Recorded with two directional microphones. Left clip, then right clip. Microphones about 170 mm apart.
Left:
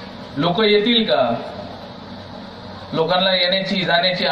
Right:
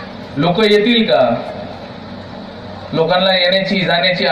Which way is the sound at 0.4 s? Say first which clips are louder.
Right 4 dB; 20° right (ahead or behind).